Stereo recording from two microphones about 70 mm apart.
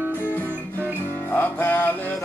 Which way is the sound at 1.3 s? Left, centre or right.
Left.